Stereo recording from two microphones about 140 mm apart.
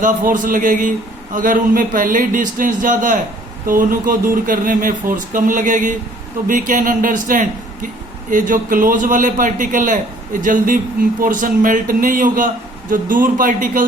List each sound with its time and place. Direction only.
0.0 s a man's voice: 70° right (ahead or behind)